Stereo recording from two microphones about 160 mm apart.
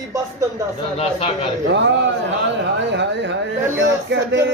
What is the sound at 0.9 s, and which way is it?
Speech, 35° left (ahead or behind).